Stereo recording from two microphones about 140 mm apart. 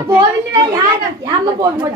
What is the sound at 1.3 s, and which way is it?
Speech, 30° right (ahead or behind).